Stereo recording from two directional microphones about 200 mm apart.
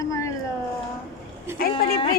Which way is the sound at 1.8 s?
45° left (ahead or behind).